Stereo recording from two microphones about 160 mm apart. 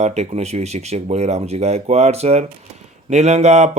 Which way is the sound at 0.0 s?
45° right (ahead or behind).